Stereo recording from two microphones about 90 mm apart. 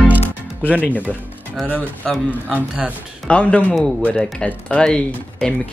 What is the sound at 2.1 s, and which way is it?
Speech, 5° left (ahead or behind).